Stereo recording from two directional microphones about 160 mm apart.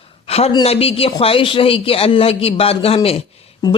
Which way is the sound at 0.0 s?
40° left (ahead or behind).